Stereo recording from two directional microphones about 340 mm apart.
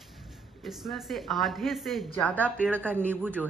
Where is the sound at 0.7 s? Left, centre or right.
Centre.